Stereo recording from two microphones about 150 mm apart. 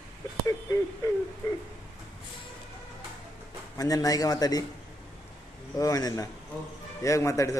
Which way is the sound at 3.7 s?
25° left (ahead or behind).